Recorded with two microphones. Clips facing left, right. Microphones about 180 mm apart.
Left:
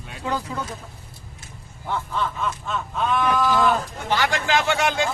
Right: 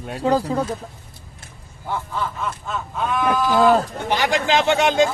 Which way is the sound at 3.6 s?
35° right (ahead or behind).